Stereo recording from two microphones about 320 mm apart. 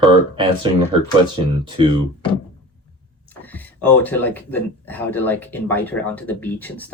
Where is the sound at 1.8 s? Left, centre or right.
Centre.